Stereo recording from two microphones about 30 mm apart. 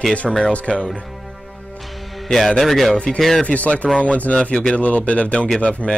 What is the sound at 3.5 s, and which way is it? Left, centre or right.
Music, left.